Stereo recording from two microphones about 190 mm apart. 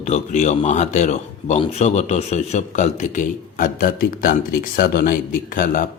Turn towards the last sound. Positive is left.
turn(degrees=45)  # may be behind; listen again after turning